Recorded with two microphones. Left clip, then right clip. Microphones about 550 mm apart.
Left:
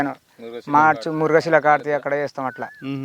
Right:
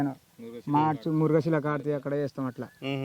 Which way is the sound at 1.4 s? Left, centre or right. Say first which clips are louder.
Left 12 dB; left.